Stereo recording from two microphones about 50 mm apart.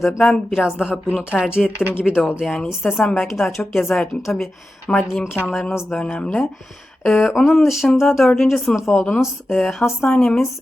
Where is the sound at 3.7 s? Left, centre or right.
Centre.